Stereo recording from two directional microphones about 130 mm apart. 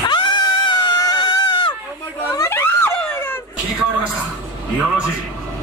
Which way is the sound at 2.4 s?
20° left (ahead or behind).